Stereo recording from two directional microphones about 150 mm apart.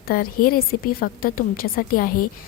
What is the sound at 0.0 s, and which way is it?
A woman's voice, 75° left (ahead or behind).